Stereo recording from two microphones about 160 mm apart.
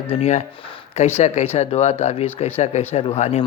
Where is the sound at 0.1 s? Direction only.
45° left (ahead or behind).